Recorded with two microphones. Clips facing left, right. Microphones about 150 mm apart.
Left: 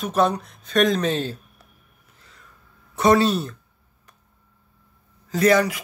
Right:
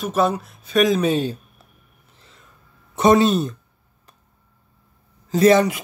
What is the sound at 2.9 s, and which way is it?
Speech, 20° right (ahead or behind).